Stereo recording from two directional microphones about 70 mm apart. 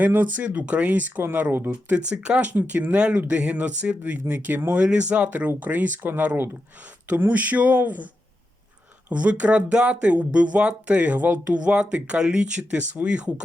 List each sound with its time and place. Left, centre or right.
0.0 s speech: right
9.0 s speech: centre